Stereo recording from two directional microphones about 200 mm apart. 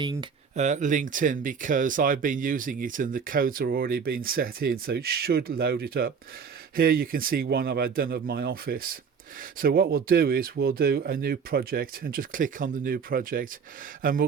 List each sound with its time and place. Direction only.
0.0 s speech: 20° right (ahead or behind)
0.5 s speech: 35° right (ahead or behind)